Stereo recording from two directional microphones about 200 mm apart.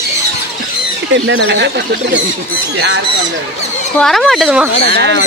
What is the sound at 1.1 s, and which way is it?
Speech, 70° right (ahead or behind).